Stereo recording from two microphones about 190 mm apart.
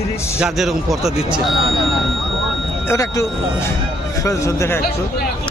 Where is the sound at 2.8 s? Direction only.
15° left (ahead or behind).